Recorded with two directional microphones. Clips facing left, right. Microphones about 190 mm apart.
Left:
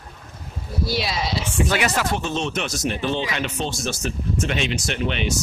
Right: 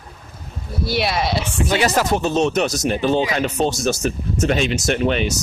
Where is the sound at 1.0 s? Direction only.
60° right (ahead or behind).